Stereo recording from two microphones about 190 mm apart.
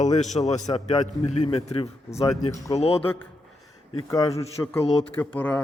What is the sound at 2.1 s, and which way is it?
Speech, 15° left (ahead or behind).